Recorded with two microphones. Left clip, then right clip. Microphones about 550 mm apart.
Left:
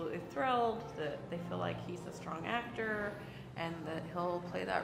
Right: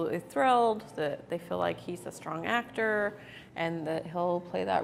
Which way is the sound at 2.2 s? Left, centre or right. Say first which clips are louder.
Right 7 dB; right.